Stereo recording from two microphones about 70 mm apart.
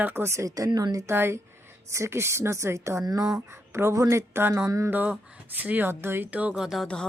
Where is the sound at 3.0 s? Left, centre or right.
Right.